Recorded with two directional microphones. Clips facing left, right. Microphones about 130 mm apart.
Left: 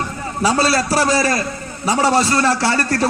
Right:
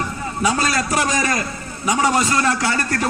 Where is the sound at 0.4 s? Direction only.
35° left (ahead or behind).